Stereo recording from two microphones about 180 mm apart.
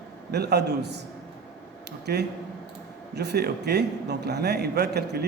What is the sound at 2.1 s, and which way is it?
A man's voice, 65° right (ahead or behind).